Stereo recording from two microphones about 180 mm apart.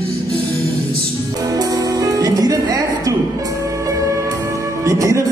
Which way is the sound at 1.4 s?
20° right (ahead or behind).